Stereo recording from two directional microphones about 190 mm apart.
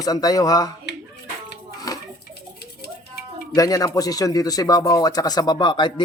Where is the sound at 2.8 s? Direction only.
55° left (ahead or behind).